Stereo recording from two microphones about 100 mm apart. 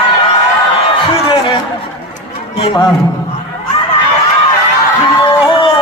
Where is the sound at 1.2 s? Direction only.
55° left (ahead or behind).